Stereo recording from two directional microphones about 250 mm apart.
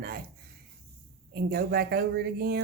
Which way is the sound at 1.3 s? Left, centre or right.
Right.